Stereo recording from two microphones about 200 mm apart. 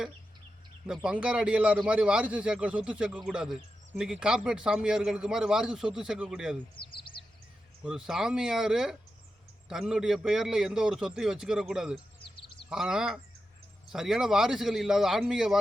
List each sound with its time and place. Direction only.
0.9 s speech: 5° right (ahead or behind)
6.8 s speech: 25° left (ahead or behind)
7.9 s speech: 5° right (ahead or behind)